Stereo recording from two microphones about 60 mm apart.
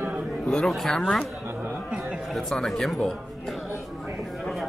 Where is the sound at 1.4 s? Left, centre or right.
Right.